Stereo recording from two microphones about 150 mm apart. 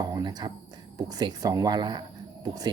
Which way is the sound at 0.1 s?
30° right (ahead or behind).